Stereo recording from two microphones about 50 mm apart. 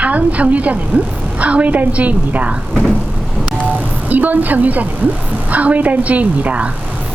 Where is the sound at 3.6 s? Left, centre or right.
Right.